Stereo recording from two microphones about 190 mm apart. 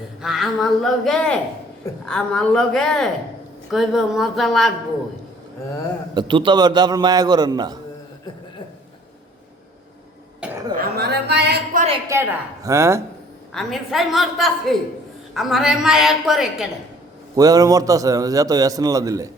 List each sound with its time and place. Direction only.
0.2 s a woman's voice: centre (ahead or behind)
6.1 s a man's voice: 25° right (ahead or behind)
10.4 s cough: 5° right (ahead or behind)
10.8 s a sound: 55° right (ahead or behind)
12.0 s a woman's voice: 15° right (ahead or behind)
13.5 s a woman's voice: centre (ahead or behind)
17.3 s a man's voice: 20° right (ahead or behind)